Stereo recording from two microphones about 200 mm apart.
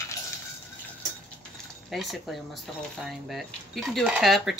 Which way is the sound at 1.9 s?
Centre (ahead or behind).